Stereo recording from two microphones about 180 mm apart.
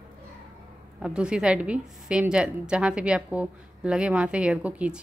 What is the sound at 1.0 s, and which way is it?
A woman's voice, 5° right (ahead or behind).